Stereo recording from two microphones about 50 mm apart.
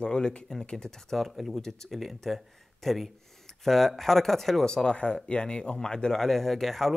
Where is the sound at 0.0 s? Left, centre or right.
Centre.